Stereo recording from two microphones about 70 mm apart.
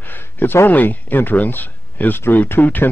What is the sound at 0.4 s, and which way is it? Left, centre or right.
Speech, left.